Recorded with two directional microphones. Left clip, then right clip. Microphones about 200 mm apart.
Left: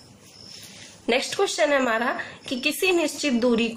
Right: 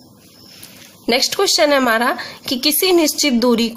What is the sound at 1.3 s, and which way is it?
A woman's voice, 45° right (ahead or behind).